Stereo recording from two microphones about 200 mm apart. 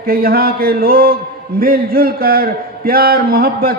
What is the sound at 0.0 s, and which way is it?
A man's voice, 50° right (ahead or behind).